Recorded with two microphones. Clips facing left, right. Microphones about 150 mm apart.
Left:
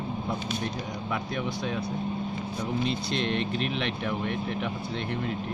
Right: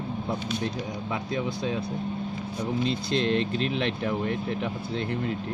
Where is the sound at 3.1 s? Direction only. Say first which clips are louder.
Right 3 dB; 30° right (ahead or behind).